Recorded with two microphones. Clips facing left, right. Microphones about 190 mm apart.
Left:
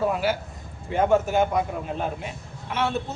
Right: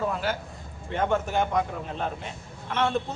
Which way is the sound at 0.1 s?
10° left (ahead or behind).